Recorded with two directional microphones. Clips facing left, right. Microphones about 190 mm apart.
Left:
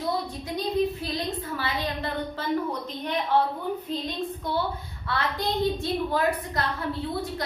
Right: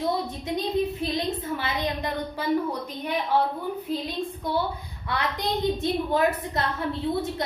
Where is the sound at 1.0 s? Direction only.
20° right (ahead or behind).